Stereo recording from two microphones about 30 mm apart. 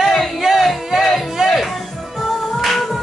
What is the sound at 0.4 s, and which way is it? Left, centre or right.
Music, centre.